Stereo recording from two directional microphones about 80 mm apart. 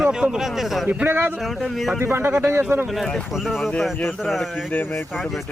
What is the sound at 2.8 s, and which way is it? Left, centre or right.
Speech, centre.